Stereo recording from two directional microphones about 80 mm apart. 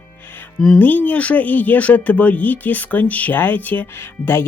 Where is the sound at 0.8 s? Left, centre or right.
Left.